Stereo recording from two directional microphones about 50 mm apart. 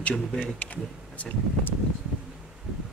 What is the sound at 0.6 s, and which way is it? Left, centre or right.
Speech, left.